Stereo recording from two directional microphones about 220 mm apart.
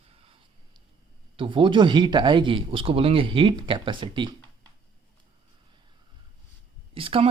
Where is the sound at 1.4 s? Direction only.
20° right (ahead or behind).